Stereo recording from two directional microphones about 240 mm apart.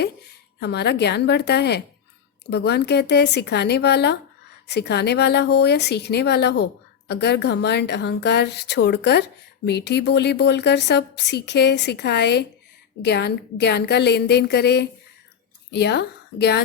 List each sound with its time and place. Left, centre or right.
0.6 s a woman's voice: left